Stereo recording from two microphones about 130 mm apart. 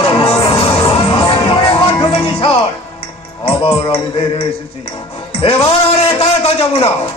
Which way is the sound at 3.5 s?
50° left (ahead or behind).